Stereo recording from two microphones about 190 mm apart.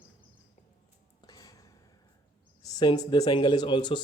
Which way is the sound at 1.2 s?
20° left (ahead or behind).